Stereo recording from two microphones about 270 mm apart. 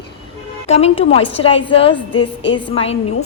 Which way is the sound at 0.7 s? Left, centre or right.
Left.